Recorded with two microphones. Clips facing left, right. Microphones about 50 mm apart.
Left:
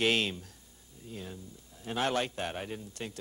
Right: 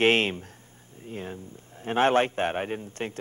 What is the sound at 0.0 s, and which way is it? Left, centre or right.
A man's voice, right.